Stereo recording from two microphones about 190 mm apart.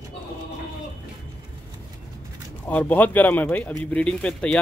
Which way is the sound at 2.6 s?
10° left (ahead or behind).